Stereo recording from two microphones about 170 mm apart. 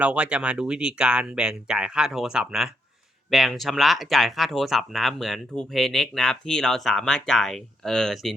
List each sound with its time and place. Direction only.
0.0 s speech: 5° right (ahead or behind)